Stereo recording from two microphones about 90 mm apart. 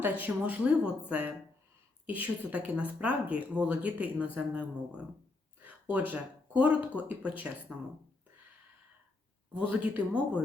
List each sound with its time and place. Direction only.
0.0 s speech: 20° right (ahead or behind)
5.6 s speech: 15° right (ahead or behind)
9.6 s speech: 15° right (ahead or behind)